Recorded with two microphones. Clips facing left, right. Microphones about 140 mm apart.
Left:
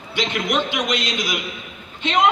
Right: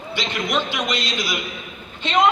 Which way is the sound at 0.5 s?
15° left (ahead or behind).